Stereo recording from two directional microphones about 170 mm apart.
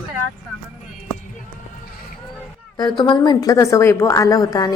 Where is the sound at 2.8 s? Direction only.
25° left (ahead or behind).